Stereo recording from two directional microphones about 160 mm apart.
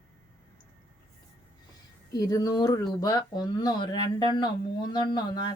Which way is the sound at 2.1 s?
20° left (ahead or behind).